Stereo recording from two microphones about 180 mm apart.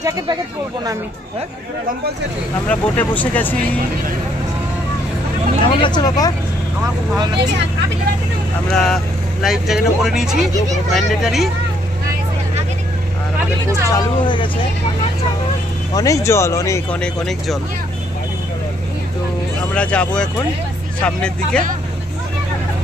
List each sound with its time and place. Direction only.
2.7 s speech: 10° left (ahead or behind)
5.8 s speech: 25° left (ahead or behind)
8.7 s speech: centre (ahead or behind)
13.8 s speech: 25° left (ahead or behind)
15.9 s speech: 20° left (ahead or behind)
17.0 s speech: centre (ahead or behind)
19.7 s speech: 5° left (ahead or behind)